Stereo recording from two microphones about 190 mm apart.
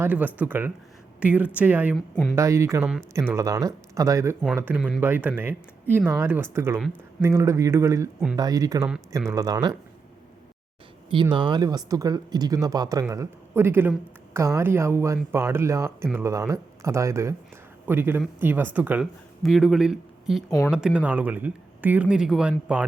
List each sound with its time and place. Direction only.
0.0 s speech: 10° right (ahead or behind)
2.8 s speech: 5° right (ahead or behind)
3.3 s speech: 15° right (ahead or behind)
11.1 s speech: 25° right (ahead or behind); by 22.9 s 5° right (ahead or behind)